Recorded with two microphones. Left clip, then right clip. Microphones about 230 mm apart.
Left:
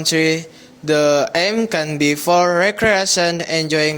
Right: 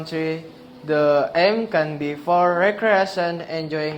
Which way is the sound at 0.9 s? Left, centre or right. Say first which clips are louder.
Left 3 dB; left.